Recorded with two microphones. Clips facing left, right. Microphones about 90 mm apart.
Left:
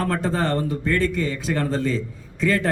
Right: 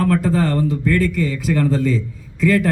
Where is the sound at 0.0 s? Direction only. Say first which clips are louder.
Right 5 dB; 25° left (ahead or behind).